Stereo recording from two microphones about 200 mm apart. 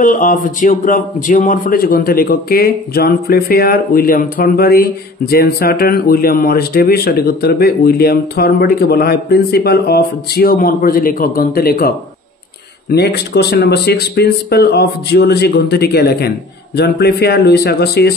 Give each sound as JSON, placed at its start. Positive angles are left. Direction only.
{"t": 0.0, "sound": "speech", "side_deg": 40}
{"t": 12.9, "sound": "speech", "side_deg": 55}